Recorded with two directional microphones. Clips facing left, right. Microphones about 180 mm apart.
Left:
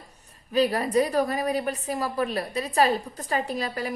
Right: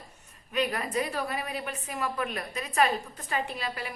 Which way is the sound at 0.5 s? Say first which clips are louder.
Left 7 dB; 35° left (ahead or behind).